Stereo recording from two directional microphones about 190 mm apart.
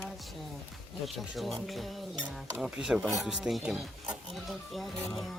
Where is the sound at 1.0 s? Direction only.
Centre (ahead or behind).